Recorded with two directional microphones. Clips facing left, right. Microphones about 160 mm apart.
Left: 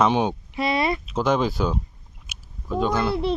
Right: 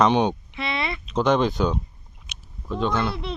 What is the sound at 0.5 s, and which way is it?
Speech, 40° left (ahead or behind).